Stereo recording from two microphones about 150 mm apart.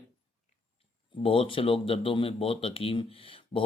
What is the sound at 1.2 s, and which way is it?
Speech, 35° left (ahead or behind).